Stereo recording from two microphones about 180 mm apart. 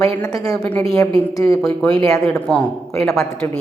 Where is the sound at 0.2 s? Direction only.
20° left (ahead or behind).